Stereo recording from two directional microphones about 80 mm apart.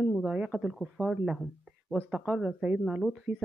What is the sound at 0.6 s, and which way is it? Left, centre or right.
Speech, centre.